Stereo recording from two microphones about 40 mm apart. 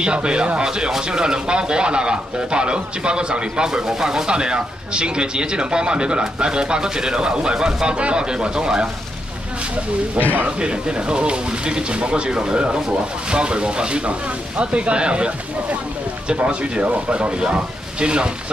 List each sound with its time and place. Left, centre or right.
0.0 s speech: right
10.6 s speech: right
16.4 s speech: right